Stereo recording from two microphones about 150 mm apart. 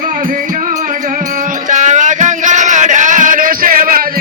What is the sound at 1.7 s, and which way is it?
Music, 55° right (ahead or behind).